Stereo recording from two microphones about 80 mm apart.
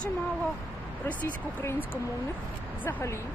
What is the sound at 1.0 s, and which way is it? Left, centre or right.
Speech, left.